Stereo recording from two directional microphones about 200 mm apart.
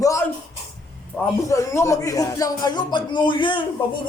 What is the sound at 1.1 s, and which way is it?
A man's voice, 10° left (ahead or behind).